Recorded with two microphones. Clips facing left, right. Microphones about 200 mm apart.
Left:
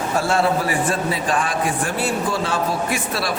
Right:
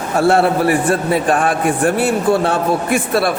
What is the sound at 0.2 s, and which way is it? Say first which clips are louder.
A man's voice: right 7 dB; 60° right (ahead or behind).